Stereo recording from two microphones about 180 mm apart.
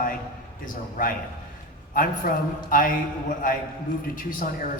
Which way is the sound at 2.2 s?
50° left (ahead or behind).